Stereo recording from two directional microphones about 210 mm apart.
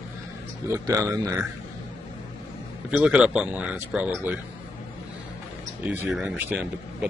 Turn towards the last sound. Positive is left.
turn(degrees=-10)  # may be behind; listen again after turning